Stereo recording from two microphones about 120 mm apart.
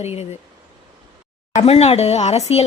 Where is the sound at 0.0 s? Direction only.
60° left (ahead or behind).